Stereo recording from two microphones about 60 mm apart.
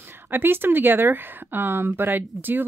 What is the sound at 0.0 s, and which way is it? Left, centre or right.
Speech, right.